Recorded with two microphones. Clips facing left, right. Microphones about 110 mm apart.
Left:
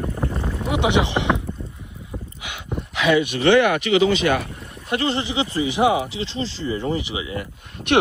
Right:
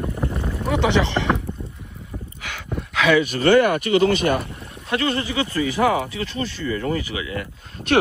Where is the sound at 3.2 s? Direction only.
45° right (ahead or behind).